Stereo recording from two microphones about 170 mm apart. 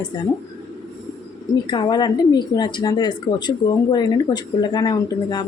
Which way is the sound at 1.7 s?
25° left (ahead or behind).